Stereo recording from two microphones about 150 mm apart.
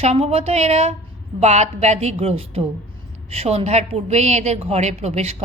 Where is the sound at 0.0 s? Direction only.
45° right (ahead or behind).